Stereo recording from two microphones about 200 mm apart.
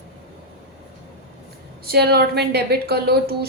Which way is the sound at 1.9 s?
50° right (ahead or behind).